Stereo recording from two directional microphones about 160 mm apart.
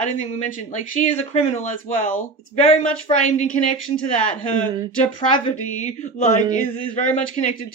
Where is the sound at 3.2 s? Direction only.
50° left (ahead or behind).